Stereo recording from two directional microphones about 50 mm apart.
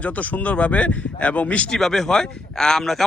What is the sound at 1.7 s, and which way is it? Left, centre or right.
Speech, centre.